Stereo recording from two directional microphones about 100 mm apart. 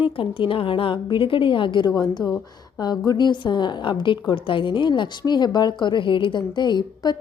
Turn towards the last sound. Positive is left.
turn(degrees=45)  # may be behind; listen again after turning